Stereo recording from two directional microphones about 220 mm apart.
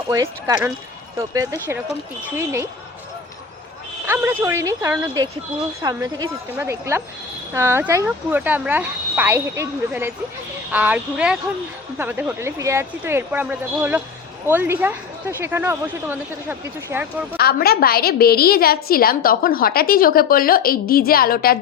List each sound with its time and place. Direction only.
0.1 s speech: 15° right (ahead or behind)
4.0 s speech: 10° right (ahead or behind)
17.3 s a woman's voice: 45° left (ahead or behind)